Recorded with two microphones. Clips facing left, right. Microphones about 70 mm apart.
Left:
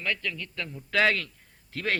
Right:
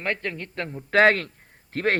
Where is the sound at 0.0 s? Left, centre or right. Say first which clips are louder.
Right 3 dB; right.